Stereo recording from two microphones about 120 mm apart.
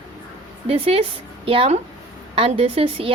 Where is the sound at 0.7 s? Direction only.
55° right (ahead or behind).